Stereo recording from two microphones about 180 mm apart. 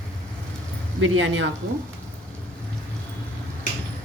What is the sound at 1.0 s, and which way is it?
Speech, 90° right.